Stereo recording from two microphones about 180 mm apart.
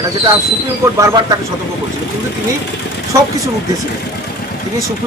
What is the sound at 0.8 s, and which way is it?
Speech, 15° right (ahead or behind).